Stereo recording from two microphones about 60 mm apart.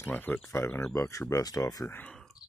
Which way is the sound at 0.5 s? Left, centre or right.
Left.